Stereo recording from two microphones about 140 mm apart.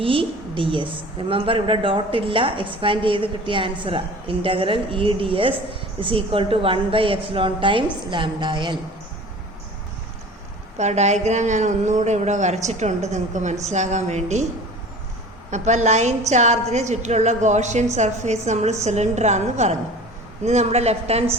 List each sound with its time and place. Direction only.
0.0 s a woman's voice: 40° right (ahead or behind)
10.8 s a woman's voice: 55° right (ahead or behind)
15.4 s a woman's voice: 55° right (ahead or behind)